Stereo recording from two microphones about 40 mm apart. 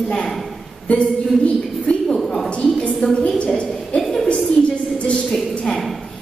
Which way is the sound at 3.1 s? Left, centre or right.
Left.